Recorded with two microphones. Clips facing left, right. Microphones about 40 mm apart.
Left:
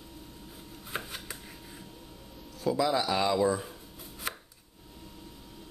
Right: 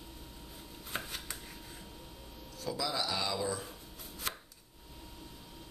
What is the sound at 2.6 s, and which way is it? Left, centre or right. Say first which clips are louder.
Speech: left 8 dB; left.